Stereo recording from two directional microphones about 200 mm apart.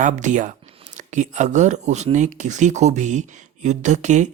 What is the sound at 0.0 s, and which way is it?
Speech, 40° right (ahead or behind).